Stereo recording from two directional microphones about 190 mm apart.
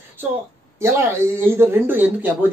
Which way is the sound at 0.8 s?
15° right (ahead or behind).